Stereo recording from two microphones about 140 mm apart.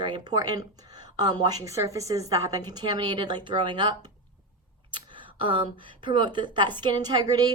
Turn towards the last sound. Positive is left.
turn(degrees=-30)  # may be behind; listen again after turning